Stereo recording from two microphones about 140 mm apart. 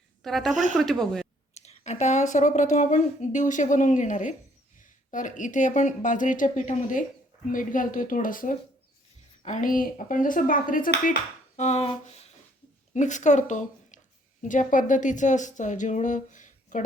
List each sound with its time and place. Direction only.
0.2 s a woman's voice: centre (ahead or behind)
1.5 s speech: 55° left (ahead or behind); by 11.1 s 80° left
11.5 s a sound: 50° left (ahead or behind)
12.9 s speech: 60° left (ahead or behind)